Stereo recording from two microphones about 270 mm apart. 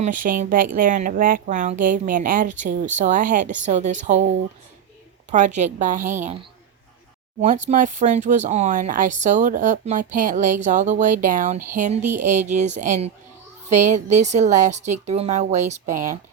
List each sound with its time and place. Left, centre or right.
0.0 s speech: right
5.3 s speech: right
7.4 s speech: right